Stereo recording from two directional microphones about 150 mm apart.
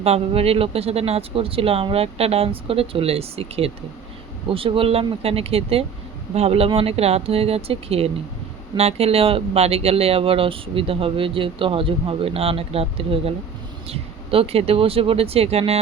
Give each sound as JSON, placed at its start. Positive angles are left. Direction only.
{"t": 0.0, "sound": "speech", "side_deg": -40}